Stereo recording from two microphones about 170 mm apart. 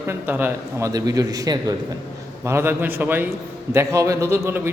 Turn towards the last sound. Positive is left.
turn(degrees=-15)  # may be behind; listen again after turning